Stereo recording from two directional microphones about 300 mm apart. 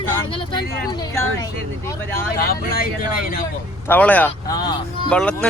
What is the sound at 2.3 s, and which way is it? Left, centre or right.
Speech, left.